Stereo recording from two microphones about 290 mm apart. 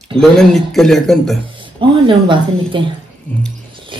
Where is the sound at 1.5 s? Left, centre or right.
Centre.